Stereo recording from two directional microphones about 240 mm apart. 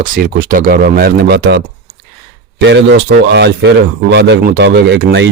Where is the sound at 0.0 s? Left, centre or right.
Right.